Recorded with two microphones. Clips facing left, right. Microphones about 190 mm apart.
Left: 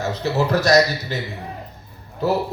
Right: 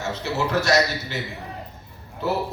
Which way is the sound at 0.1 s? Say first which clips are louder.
Left 3 dB; 35° left (ahead or behind).